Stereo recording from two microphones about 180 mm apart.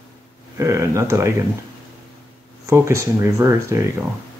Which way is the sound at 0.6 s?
15° right (ahead or behind).